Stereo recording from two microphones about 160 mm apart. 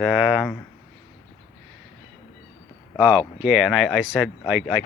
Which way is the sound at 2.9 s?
5° right (ahead or behind).